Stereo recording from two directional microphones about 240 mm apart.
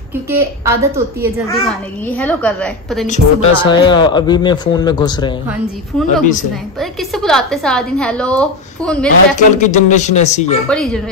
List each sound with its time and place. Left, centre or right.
0.3 s a woman's voice: centre
1.7 s a woman's voice: centre
3.1 s a man's voice: left
5.5 s a woman's voice: centre
9.6 s speech: left
10.7 s a woman's voice: centre